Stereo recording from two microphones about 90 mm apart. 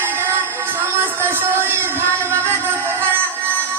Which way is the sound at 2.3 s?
25° right (ahead or behind).